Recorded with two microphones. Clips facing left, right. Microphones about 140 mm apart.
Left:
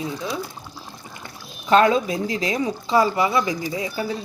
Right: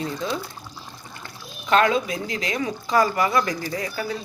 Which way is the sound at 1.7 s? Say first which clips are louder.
Left 3 dB; 30° left (ahead or behind).